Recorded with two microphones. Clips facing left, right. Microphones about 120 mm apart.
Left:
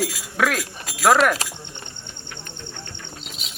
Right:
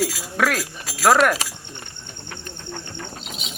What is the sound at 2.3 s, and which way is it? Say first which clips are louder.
Bird: right 4 dB; 50° right (ahead or behind).